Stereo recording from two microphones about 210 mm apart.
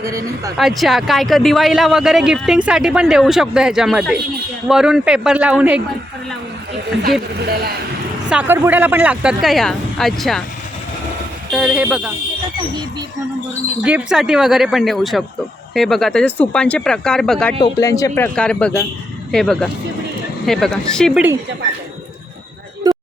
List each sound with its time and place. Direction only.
0.0 s speech: 15° right (ahead or behind)
0.5 s speech: centre (ahead or behind)
8.3 s speech: 10° right (ahead or behind)
11.5 s speech: 5° right (ahead or behind)
13.8 s speech: 5° right (ahead or behind)
17.6 s speech: 15° left (ahead or behind)
22.8 s a sound: 20° right (ahead or behind)